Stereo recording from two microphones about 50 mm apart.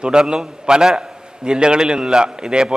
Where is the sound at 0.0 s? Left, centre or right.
Centre.